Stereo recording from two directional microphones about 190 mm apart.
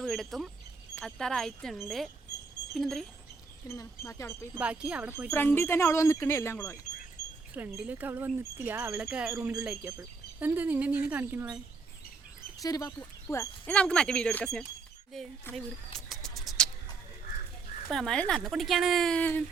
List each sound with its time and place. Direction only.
0.0 s speech: centre (ahead or behind)
3.7 s speech: 15° left (ahead or behind)
4.5 s speech: 5° right (ahead or behind)
5.3 s speech: 10° left (ahead or behind)
7.5 s speech: 10° right (ahead or behind)
12.6 s speech: 20° left (ahead or behind)
15.5 s bird: centre (ahead or behind)
17.8 s speech: centre (ahead or behind)